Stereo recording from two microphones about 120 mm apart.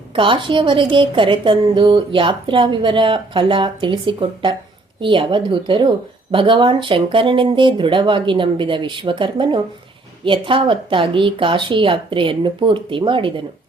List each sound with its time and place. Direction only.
0.1 s a woman's voice: 45° right (ahead or behind)